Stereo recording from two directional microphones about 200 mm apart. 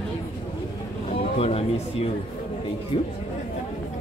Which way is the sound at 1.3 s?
30° left (ahead or behind).